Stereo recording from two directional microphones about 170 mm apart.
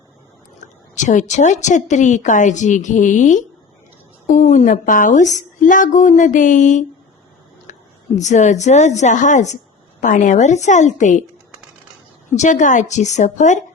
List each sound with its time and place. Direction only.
0.6 s a woman's voice: 45° left (ahead or behind)
12.4 s a woman's voice: 45° left (ahead or behind)